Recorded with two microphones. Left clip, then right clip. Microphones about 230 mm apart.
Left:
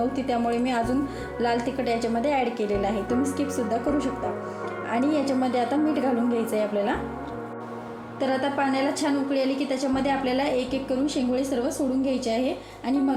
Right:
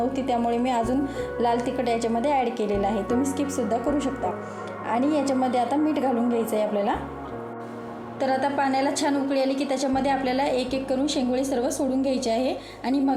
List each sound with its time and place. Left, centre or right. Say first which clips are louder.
0.3 s a woman's voice: right 3 dB; centre
8.2 s a woman's voice: right 1 dB; centre